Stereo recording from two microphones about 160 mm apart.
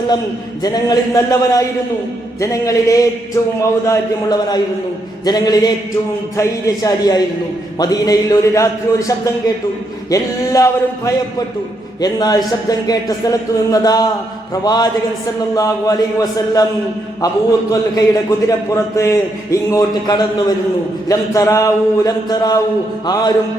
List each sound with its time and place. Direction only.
0.6 s a man's voice: 25° left (ahead or behind)
17.2 s a man's voice: 20° left (ahead or behind)